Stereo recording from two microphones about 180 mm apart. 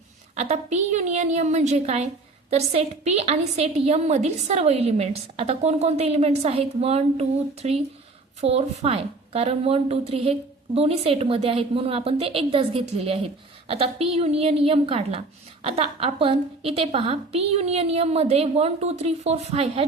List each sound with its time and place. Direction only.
0.3 s a woman's voice: 35° right (ahead or behind)